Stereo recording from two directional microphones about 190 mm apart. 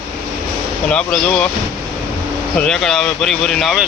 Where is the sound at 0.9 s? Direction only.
5° left (ahead or behind).